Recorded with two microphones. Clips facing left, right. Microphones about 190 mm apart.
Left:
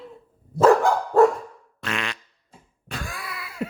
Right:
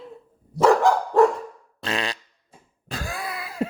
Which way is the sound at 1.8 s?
35° right (ahead or behind).